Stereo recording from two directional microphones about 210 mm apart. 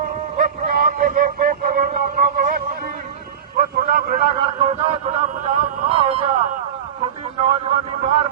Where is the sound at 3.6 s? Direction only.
45° right (ahead or behind).